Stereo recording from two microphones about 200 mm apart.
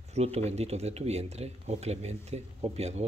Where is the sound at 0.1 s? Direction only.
30° right (ahead or behind).